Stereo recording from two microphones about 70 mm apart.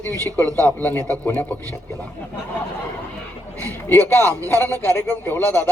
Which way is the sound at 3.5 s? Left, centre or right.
Right.